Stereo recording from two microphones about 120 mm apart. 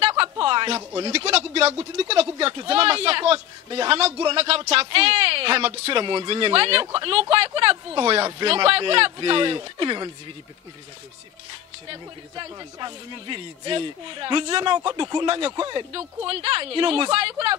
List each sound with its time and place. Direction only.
0.1 s a sound: 45° right (ahead or behind)
1.1 s speech: 55° right (ahead or behind); by 10.1 s 40° right (ahead or behind)
11.9 s speech: 40° right (ahead or behind)